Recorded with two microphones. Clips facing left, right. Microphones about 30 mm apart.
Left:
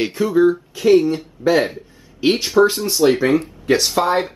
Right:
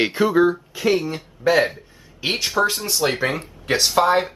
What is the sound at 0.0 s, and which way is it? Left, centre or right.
Speech, centre.